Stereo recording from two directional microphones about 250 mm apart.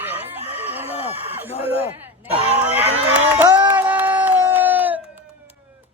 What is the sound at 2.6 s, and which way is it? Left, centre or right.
Crowd, centre.